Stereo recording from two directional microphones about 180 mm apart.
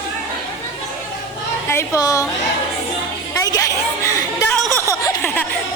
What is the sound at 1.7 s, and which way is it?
Speech, 20° left (ahead or behind).